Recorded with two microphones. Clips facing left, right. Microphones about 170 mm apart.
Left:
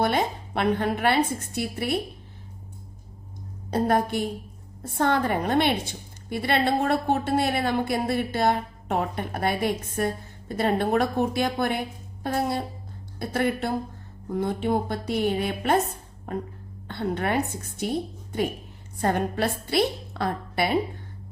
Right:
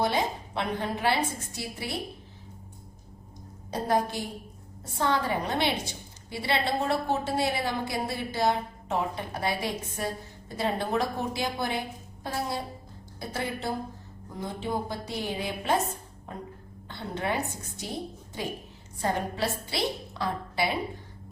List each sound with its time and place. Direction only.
0.0 s a woman's voice: 60° left (ahead or behind)
3.7 s a woman's voice: 60° left (ahead or behind)
16.9 s a woman's voice: 60° left (ahead or behind)
18.9 s a woman's voice: 55° left (ahead or behind)